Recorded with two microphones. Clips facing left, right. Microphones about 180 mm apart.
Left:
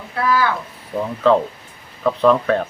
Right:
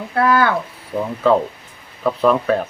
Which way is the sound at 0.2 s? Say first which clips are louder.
Right 3 dB; 55° right (ahead or behind).